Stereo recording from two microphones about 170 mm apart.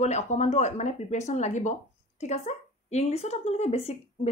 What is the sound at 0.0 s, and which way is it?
Speech, 40° left (ahead or behind).